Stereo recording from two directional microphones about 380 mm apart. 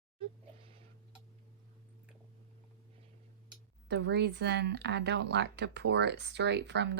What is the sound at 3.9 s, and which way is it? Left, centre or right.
Speech, right.